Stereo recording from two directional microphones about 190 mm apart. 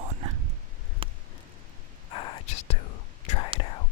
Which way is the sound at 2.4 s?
35° left (ahead or behind).